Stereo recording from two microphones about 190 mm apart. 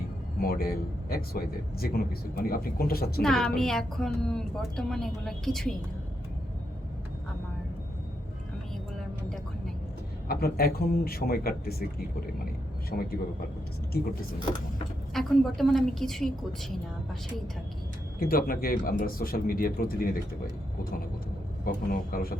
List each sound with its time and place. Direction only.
0.3 s a man's voice: 50° left (ahead or behind)
3.2 s a woman's voice: 5° left (ahead or behind)
10.2 s speech: 55° left (ahead or behind)
12.9 s speech: 55° left (ahead or behind)
15.1 s a woman's voice: centre (ahead or behind)
18.2 s speech: 50° left (ahead or behind)
21.6 s speech: 50° left (ahead or behind)